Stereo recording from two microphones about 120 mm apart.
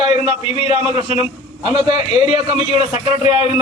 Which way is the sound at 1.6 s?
45° right (ahead or behind).